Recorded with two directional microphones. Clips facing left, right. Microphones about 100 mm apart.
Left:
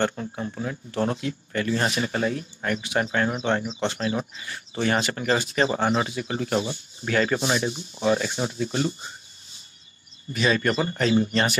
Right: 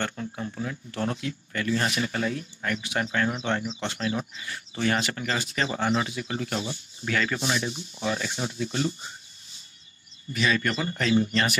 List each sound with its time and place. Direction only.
0.0 s speech: 30° left (ahead or behind)
10.3 s speech: 30° left (ahead or behind)